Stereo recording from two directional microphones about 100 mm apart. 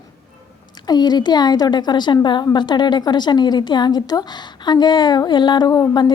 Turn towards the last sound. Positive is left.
turn(degrees=40)  # may be behind; listen again after turning